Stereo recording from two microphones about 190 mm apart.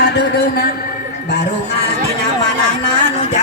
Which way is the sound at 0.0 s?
60° left (ahead or behind).